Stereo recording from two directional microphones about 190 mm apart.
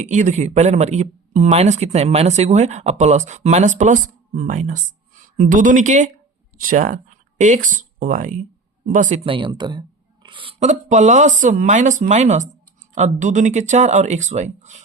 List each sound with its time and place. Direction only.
0.0 s speech: 40° right (ahead or behind)
9.2 s speech: 25° right (ahead or behind)